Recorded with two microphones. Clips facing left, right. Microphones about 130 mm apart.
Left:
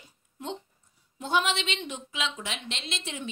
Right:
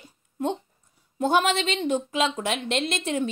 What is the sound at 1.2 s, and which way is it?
Speech, 50° right (ahead or behind).